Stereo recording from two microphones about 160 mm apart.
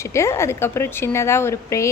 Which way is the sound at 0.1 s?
15° left (ahead or behind).